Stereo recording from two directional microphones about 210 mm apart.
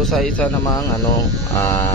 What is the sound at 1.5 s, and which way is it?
Speech, 10° left (ahead or behind).